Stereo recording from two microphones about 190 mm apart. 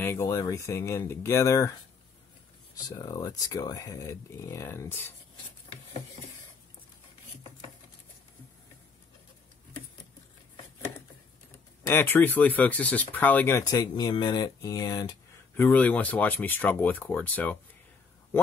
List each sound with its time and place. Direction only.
0.0 s speech: 15° left (ahead or behind)
2.7 s speech: 20° left (ahead or behind)
11.8 s speech: 10° left (ahead or behind)
15.5 s speech: 10° left (ahead or behind)